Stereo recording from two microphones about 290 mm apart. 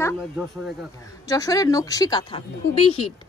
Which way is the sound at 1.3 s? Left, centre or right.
Centre.